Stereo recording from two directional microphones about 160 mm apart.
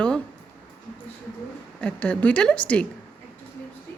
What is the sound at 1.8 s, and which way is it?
A woman's voice, 5° left (ahead or behind).